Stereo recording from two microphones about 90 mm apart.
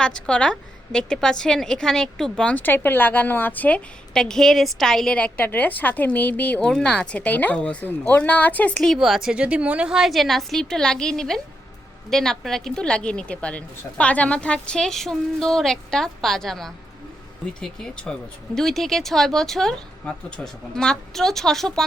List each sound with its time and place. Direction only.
0.0 s a woman's voice: 10° left (ahead or behind)
4.1 s a woman's voice: 5° left (ahead or behind)
9.0 s a woman's voice: 5° right (ahead or behind)